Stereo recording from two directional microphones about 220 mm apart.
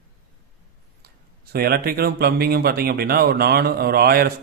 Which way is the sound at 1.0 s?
45° right (ahead or behind).